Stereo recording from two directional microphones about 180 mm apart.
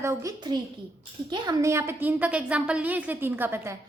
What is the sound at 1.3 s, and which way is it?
A woman's voice, 20° right (ahead or behind).